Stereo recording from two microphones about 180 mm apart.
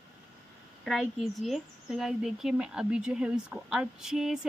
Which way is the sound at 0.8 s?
Centre (ahead or behind).